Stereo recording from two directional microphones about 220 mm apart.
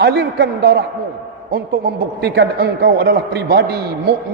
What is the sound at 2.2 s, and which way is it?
A man's voice, 50° right (ahead or behind).